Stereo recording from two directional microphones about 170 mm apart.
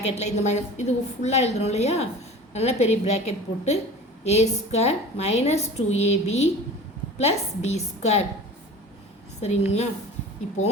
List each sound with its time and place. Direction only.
0.0 s a woman's voice: 40° left (ahead or behind)
9.4 s a woman's voice: 40° left (ahead or behind)